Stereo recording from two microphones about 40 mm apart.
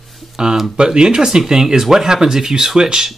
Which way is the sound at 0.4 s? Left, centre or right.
Right.